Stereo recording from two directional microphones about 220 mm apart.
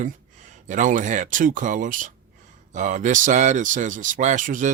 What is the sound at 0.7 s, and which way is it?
Speech, 35° right (ahead or behind).